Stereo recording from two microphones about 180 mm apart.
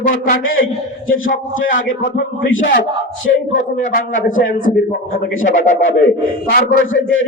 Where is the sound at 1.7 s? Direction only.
50° left (ahead or behind).